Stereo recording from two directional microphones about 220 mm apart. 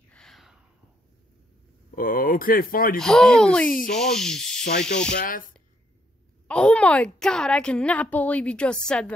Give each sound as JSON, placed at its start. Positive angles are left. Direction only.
{"t": 0.1, "sound": "a sound", "side_deg": 0}
{"t": 2.0, "sound": "speech", "side_deg": 40}
{"t": 3.0, "sound": "a woman's voice", "side_deg": 5}
{"t": 6.4, "sound": "a woman's voice", "side_deg": 5}